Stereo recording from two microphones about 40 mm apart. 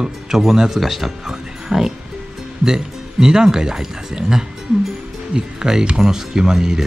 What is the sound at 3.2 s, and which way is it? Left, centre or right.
Speech, centre.